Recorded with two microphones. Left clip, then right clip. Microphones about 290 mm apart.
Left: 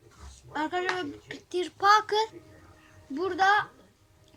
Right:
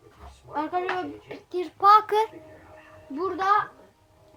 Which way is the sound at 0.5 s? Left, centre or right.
Left.